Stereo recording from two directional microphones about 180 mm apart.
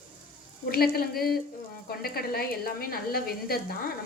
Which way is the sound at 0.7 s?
55° left (ahead or behind).